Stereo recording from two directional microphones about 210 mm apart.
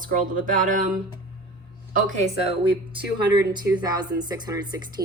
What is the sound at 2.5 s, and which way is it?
Speech, 20° right (ahead or behind).